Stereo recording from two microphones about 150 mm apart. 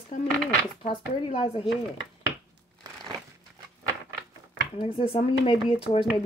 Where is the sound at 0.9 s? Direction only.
35° left (ahead or behind).